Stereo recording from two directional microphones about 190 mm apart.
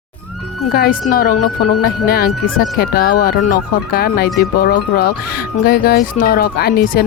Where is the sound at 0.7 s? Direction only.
55° left (ahead or behind).